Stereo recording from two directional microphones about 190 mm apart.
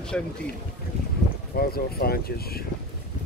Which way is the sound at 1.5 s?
55° left (ahead or behind).